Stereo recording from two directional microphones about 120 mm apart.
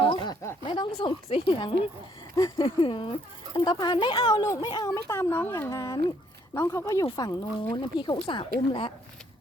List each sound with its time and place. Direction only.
0.0 s a sound: 45° left (ahead or behind)
0.6 s a woman's voice: 45° left (ahead or behind)
2.3 s speech: 30° left (ahead or behind)
2.6 s speech: 50° left (ahead or behind)
4.9 s speech: 25° left (ahead or behind); by 8.9 s 45° left (ahead or behind)